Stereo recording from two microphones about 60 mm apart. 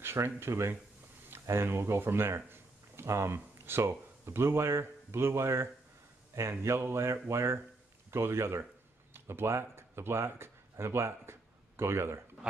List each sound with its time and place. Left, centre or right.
0.0 s speech: right